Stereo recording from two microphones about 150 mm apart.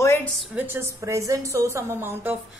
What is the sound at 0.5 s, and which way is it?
A woman's voice, 15° right (ahead or behind).